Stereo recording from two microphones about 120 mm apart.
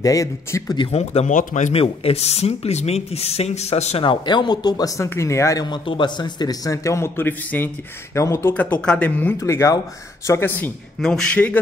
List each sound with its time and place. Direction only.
0.0 s a man's voice: 30° left (ahead or behind)
0.9 s speech: 75° left (ahead or behind)
1.7 s speech: 55° left (ahead or behind)
4.0 s speech: 40° left (ahead or behind); by 5.7 s 25° left (ahead or behind)
5.7 s a man's voice: 40° left (ahead or behind)
8.5 s speech: 10° left (ahead or behind)
11.0 s speech: 5° left (ahead or behind)